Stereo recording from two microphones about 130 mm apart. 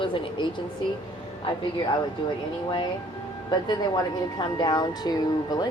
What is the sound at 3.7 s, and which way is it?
Speech, 30° left (ahead or behind).